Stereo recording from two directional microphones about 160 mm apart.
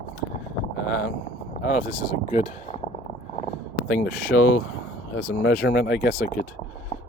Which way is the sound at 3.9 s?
65° left (ahead or behind).